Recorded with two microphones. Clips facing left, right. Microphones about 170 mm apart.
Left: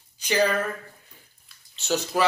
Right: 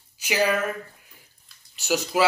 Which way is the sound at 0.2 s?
10° right (ahead or behind).